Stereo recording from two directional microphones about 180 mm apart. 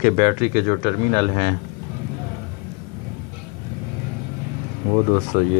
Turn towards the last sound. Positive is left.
turn(degrees=40)  # may be behind; listen again after turning